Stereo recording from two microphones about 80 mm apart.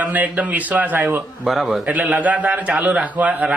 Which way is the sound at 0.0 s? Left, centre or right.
Centre.